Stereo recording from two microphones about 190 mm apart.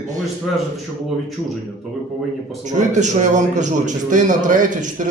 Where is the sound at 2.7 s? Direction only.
40° right (ahead or behind).